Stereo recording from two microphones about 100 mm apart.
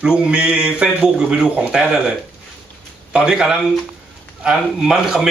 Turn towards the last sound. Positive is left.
turn(degrees=-5)  # may be behind; listen again after turning